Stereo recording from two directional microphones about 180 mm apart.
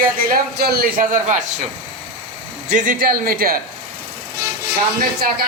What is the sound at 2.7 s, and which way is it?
Speech, 45° right (ahead or behind).